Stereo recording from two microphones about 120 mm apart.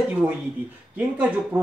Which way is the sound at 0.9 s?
15° right (ahead or behind).